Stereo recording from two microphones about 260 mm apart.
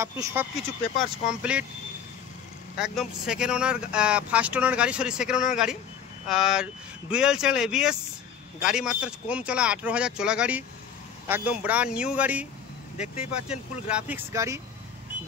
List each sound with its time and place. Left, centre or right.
0.0 s speech: centre
2.8 s speech: centre
12.9 s speech: left
13.5 s speech: centre